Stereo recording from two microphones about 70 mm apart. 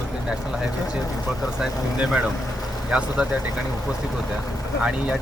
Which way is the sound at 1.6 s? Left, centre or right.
Centre.